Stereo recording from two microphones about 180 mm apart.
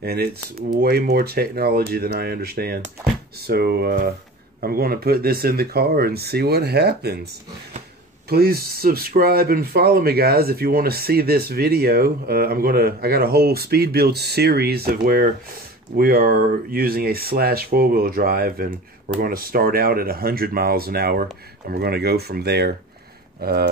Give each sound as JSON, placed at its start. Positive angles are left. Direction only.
{"t": 0.0, "sound": "speech", "side_deg": -60}
{"t": 8.3, "sound": "speech", "side_deg": -60}